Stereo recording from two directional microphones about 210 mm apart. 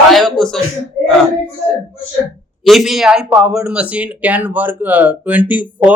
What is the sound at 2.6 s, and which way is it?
Speech, centre (ahead or behind).